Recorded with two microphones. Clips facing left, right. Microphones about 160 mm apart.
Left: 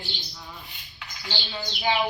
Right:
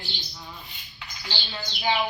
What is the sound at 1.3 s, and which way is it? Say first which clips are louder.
Speech: left 3 dB; centre (ahead or behind).